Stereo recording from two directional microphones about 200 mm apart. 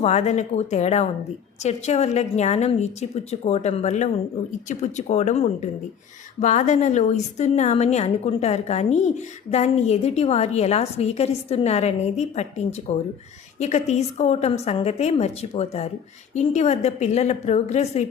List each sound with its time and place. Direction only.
0.0 s a woman's voice: 35° left (ahead or behind)